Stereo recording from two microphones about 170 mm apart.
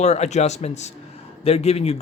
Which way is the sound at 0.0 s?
40° left (ahead or behind).